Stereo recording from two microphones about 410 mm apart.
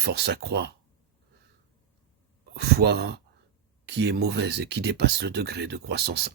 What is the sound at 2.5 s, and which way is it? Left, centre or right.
Speech, right.